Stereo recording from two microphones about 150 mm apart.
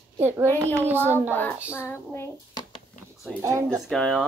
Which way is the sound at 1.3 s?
10° left (ahead or behind).